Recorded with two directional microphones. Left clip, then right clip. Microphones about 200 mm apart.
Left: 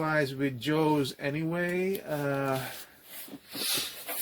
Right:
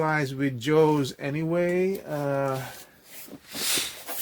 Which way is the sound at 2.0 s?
20° right (ahead or behind).